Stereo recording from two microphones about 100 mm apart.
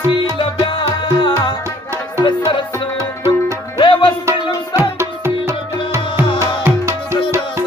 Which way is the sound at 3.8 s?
55° left (ahead or behind).